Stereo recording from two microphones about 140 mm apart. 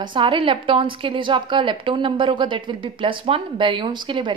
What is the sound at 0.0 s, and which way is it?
Speech, 35° right (ahead or behind).